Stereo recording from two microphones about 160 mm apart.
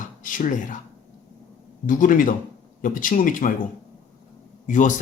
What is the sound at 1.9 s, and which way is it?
Speech, 55° left (ahead or behind).